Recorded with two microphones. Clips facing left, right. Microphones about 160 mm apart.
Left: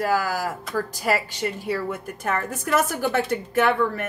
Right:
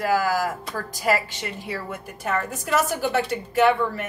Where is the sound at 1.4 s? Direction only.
45° left (ahead or behind).